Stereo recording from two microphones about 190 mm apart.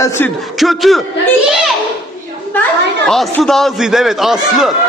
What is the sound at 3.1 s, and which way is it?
A man's voice, centre (ahead or behind).